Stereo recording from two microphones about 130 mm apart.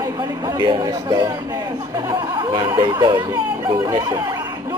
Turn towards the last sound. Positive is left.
turn(degrees=-30)  # may be behind; listen again after turning